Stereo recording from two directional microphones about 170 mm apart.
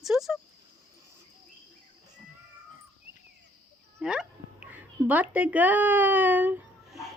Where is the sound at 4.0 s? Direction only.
5° right (ahead or behind).